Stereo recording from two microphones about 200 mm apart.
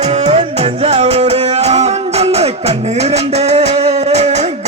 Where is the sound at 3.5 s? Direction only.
35° right (ahead or behind).